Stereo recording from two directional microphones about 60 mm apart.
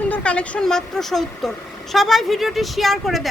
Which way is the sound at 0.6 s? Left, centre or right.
Centre.